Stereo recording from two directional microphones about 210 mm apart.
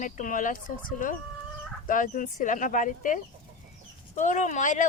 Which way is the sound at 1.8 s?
40° left (ahead or behind).